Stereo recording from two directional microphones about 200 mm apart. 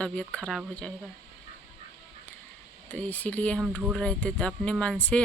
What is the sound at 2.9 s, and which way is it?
Speech, 5° left (ahead or behind).